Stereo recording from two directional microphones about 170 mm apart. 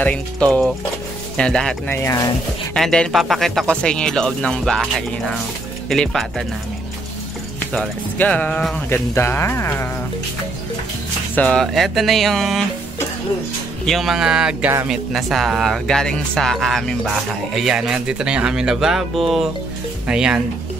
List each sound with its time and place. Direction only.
0.0 s speech: 5° left (ahead or behind)
2.0 s speech: 20° left (ahead or behind)
2.7 s speech: 5° left (ahead or behind)
5.9 s speech: centre (ahead or behind)
7.7 s speech: 5° left (ahead or behind)
11.3 s speech: 5° left (ahead or behind)
13.8 s speech: centre (ahead or behind)